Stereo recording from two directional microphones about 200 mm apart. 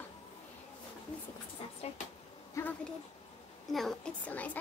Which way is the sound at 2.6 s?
15° left (ahead or behind).